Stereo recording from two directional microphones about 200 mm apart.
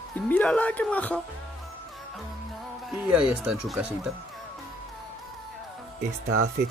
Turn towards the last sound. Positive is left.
turn(degrees=-90)